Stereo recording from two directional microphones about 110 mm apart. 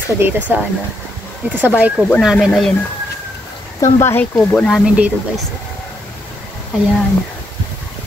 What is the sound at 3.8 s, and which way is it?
Speech, 25° left (ahead or behind).